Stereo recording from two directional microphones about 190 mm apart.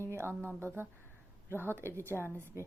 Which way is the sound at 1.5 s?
10° left (ahead or behind).